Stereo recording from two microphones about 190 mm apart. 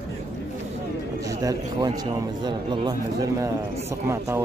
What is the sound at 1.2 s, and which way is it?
Speech, 20° right (ahead or behind).